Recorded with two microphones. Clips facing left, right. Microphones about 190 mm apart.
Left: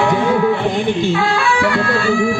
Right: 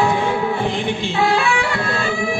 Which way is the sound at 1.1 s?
20° right (ahead or behind).